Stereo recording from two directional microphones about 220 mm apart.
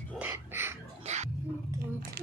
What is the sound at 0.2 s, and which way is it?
Music, 10° right (ahead or behind).